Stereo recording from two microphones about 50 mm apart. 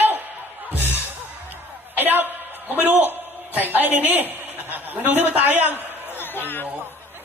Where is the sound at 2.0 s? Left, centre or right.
Right.